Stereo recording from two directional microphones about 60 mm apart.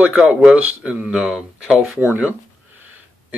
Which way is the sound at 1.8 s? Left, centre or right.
Right.